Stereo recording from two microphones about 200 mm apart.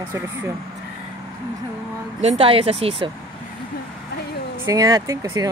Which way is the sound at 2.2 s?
30° right (ahead or behind).